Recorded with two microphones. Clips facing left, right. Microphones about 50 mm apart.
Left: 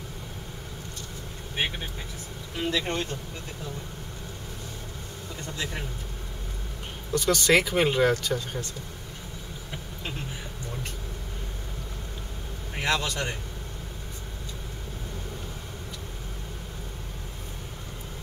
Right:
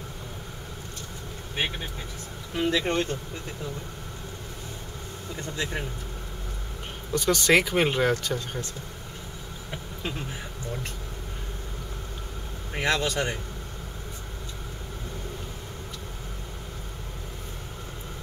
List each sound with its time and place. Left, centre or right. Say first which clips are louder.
2.5 s speech: right 3 dB; centre
2.9 s speech: right 4 dB; right
5.3 s speech: right 3 dB; right
7.1 s speech: even; centre
12.7 s speech: right 2 dB; centre